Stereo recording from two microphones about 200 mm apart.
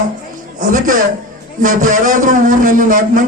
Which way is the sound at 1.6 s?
40° right (ahead or behind).